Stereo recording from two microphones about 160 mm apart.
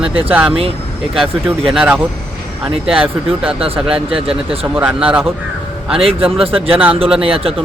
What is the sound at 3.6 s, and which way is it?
Speech, 35° right (ahead or behind).